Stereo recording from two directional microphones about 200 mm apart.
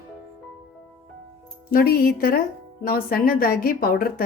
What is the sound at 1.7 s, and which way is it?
A woman's voice, 50° left (ahead or behind).